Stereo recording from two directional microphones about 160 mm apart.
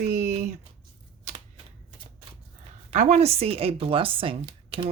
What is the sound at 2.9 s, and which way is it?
Speech, 50° right (ahead or behind).